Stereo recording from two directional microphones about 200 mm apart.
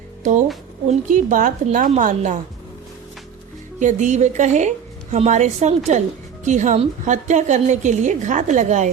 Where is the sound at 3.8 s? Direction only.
35° right (ahead or behind).